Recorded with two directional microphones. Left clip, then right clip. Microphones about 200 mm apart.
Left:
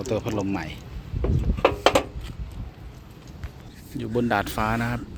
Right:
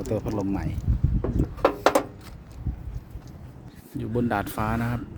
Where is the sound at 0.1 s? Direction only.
10° right (ahead or behind).